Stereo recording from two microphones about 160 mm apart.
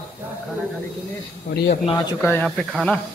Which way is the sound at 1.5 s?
75° left (ahead or behind).